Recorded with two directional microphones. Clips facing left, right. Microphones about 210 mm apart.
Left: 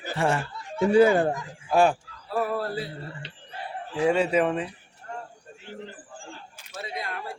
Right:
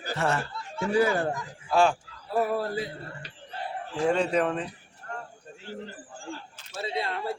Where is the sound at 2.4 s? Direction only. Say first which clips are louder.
Right 1 dB; 15° right (ahead or behind).